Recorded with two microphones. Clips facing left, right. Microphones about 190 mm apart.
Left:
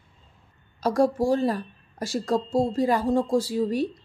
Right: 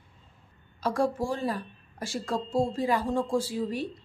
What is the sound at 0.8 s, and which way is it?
A woman's voice, 40° left (ahead or behind).